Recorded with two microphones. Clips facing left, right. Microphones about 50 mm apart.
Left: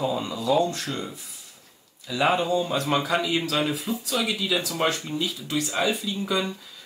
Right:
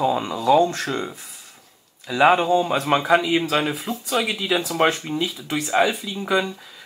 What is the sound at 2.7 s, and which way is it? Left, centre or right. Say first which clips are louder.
Speech: right 5 dB; right.